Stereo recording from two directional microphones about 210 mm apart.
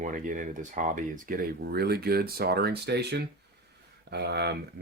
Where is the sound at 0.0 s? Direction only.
40° right (ahead or behind).